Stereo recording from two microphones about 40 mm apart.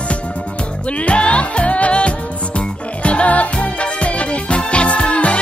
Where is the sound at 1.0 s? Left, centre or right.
Left.